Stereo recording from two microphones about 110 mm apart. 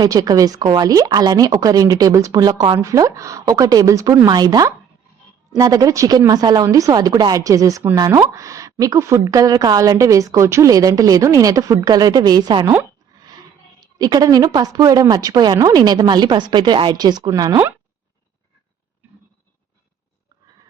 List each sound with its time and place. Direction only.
0.0 s a woman's voice: 35° right (ahead or behind)
4.3 s a woman's voice: 35° right (ahead or behind)